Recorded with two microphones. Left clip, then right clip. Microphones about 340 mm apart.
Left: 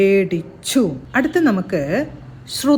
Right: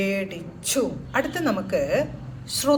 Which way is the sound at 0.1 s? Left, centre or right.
Left.